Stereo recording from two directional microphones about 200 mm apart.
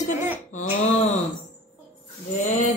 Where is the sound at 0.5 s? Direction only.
35° left (ahead or behind).